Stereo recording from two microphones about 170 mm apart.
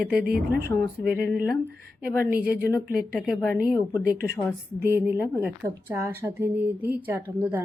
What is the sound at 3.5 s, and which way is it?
Speech, 10° right (ahead or behind).